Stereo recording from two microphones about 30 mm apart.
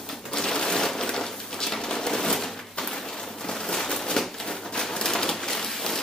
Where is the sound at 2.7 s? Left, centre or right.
Left.